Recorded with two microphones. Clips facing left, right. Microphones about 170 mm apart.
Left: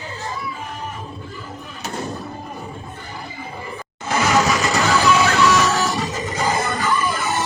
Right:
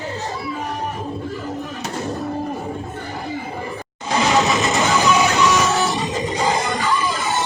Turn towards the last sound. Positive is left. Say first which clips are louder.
# even
turn(degrees=-15)  # may be behind; listen again after turning